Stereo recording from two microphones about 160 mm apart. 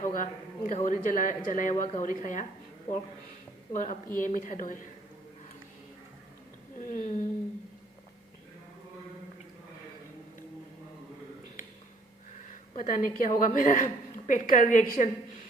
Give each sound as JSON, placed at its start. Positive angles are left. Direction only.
{"t": 0.0, "sound": "speech", "side_deg": 50}
{"t": 3.7, "sound": "a woman's voice", "side_deg": 55}
{"t": 6.7, "sound": "speech", "side_deg": 50}
{"t": 12.5, "sound": "a woman's voice", "side_deg": 55}